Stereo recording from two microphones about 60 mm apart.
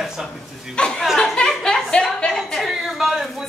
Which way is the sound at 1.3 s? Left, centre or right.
Centre.